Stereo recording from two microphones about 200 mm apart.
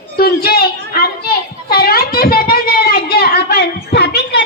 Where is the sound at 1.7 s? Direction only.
50° left (ahead or behind).